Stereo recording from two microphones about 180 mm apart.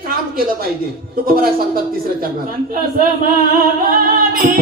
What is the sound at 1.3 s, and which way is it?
Music, 55° right (ahead or behind).